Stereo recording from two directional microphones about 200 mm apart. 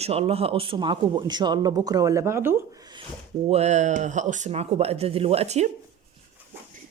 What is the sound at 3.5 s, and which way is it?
Speech, 35° right (ahead or behind).